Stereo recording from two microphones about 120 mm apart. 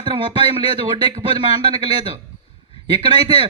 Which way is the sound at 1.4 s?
40° right (ahead or behind).